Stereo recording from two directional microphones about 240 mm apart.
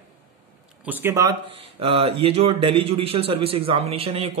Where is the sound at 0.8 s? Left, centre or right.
Centre; by 4.2 s right.